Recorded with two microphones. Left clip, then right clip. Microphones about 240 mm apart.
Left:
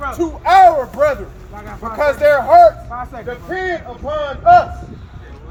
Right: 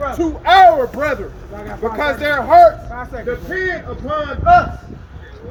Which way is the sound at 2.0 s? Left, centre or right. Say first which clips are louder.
Left 6 dB; left.